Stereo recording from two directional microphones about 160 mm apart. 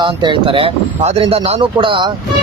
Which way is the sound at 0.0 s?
30° right (ahead or behind).